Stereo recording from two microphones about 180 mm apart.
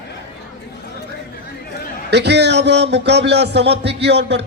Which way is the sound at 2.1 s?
70° right (ahead or behind).